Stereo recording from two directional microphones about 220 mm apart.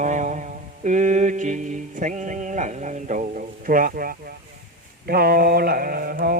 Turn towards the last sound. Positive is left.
turn(degrees=-40)  # may be behind; listen again after turning